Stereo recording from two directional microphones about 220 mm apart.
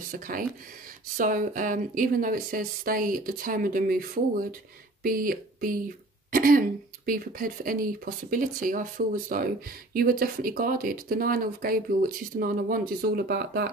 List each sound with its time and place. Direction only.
0.1 s speech: 40° right (ahead or behind)